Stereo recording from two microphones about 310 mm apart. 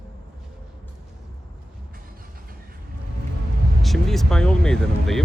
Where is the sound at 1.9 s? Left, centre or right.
Right.